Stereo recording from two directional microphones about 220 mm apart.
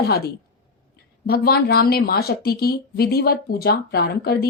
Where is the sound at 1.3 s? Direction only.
45° left (ahead or behind).